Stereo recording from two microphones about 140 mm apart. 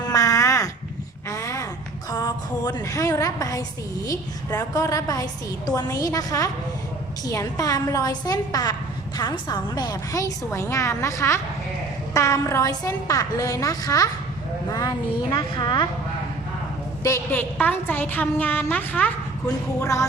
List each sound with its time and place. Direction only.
0.1 s a sound: 25° left (ahead or behind)
1.3 s babbling: 25° left (ahead or behind)
2.0 s a woman's voice: 25° left (ahead or behind)
17.0 s a woman's voice: 15° left (ahead or behind)
19.8 s a woman's voice: 20° left (ahead or behind)